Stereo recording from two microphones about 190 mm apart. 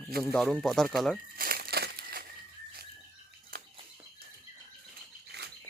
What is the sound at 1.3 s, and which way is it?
Crushing, 50° right (ahead or behind).